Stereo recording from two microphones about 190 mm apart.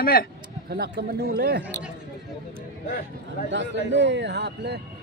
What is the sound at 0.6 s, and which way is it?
Speech, 55° right (ahead or behind).